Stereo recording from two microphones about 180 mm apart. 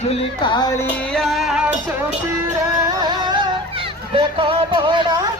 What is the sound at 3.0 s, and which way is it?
Music, 25° right (ahead or behind).